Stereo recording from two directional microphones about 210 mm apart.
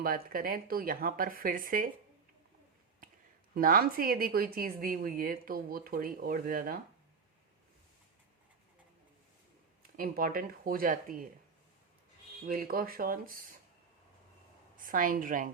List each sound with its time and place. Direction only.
0.0 s a woman's voice: 45° right (ahead or behind)
3.5 s a woman's voice: 45° right (ahead or behind)
10.0 s a woman's voice: 45° right (ahead or behind)
12.5 s a woman's voice: 45° right (ahead or behind)
14.8 s a woman's voice: 40° right (ahead or behind)